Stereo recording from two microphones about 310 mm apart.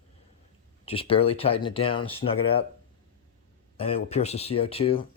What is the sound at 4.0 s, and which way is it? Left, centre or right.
Speech, left.